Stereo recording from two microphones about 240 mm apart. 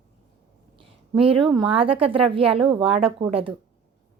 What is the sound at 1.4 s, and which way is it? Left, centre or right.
A woman's voice, right.